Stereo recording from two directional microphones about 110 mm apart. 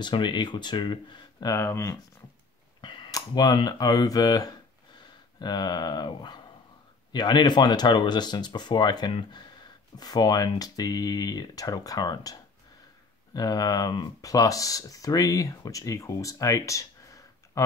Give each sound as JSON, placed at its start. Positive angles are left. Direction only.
{"t": 0.0, "sound": "speech", "side_deg": 45}
{"t": 1.5, "sound": "speech", "side_deg": 25}
{"t": 2.8, "sound": "speech", "side_deg": 45}